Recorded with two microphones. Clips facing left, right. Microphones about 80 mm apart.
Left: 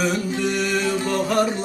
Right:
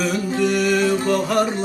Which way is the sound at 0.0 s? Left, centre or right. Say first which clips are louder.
Right 2 dB; centre.